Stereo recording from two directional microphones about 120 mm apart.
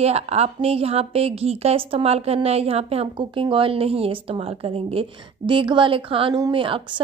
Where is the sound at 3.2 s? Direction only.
45° right (ahead or behind).